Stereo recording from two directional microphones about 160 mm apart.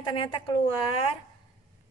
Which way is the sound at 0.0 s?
30° left (ahead or behind).